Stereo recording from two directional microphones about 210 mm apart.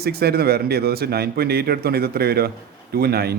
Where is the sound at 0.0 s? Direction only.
50° right (ahead or behind).